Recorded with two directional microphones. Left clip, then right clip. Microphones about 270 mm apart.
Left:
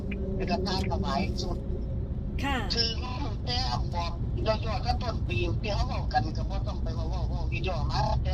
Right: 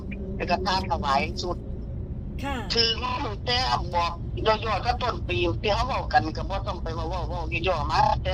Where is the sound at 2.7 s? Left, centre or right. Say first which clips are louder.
Right 7 dB; right.